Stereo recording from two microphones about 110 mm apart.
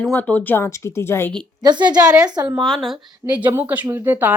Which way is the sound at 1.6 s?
40° right (ahead or behind).